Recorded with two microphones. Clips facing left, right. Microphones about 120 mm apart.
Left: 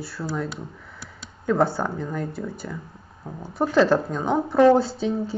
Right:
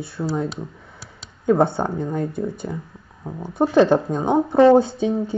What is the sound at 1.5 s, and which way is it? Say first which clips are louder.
Speech: right 4 dB; 20° right (ahead or behind).